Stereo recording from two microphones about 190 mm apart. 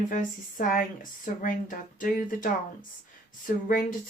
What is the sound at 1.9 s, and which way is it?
Speech, 45° left (ahead or behind).